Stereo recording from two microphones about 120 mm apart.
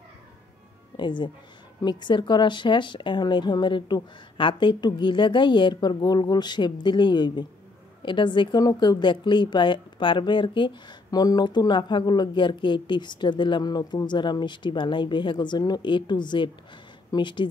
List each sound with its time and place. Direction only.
0.9 s speech: 40° left (ahead or behind)